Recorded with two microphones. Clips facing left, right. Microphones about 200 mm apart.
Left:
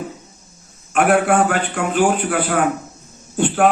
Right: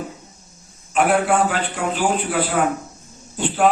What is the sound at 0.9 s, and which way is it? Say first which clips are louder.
A man's voice: left 2 dB; 55° left (ahead or behind).